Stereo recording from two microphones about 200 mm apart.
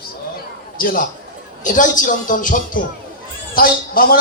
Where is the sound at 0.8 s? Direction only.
45° left (ahead or behind).